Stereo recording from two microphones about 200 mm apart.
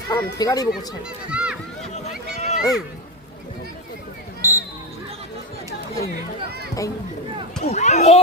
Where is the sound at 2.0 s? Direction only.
35° left (ahead or behind).